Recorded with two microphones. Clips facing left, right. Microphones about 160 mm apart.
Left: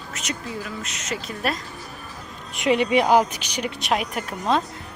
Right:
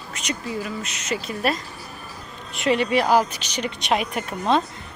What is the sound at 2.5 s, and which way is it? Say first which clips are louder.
A woman's voice: left 1 dB; 15° left (ahead or behind).